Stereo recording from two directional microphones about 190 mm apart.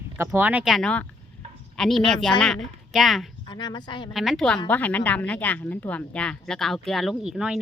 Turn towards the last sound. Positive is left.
turn(degrees=-5)  # may be behind; listen again after turning